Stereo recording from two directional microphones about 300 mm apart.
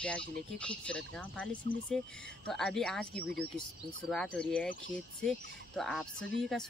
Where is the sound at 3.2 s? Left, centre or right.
Right.